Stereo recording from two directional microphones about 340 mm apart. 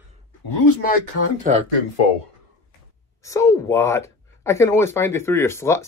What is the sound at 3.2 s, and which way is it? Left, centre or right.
Speech, centre.